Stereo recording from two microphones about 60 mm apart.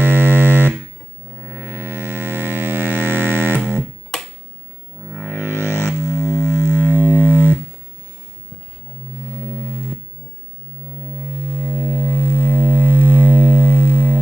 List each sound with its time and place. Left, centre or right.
0.0 s music: right
5.2 s music: right
9.4 s music: right
11.1 s a sound: right